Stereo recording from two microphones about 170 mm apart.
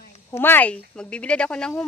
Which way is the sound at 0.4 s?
10° left (ahead or behind).